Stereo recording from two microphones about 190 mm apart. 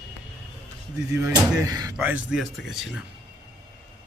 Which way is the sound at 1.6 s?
20° right (ahead or behind).